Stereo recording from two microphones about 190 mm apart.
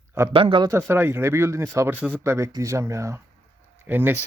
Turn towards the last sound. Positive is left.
turn(degrees=-10)  # may be behind; listen again after turning